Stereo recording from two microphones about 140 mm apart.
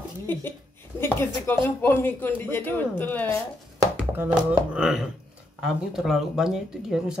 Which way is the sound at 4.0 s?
10° right (ahead or behind).